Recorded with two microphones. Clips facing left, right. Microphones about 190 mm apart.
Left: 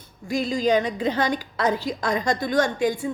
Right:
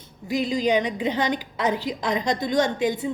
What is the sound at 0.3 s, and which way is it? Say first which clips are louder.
A woman's voice: left 1 dB; 20° right (ahead or behind).